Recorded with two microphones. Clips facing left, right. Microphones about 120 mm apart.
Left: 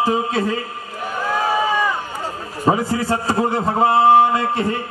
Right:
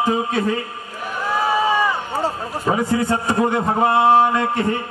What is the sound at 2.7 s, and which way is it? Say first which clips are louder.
A man's voice: left 1 dB; 35° left (ahead or behind).